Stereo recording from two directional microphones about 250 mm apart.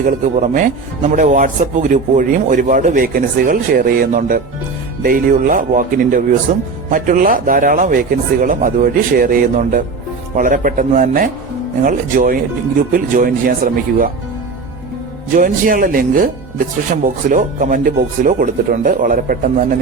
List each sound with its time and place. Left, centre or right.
0.0 s speech: right
15.4 s speech: right